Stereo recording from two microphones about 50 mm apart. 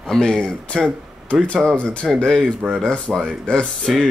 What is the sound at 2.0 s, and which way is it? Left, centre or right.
Speech, centre.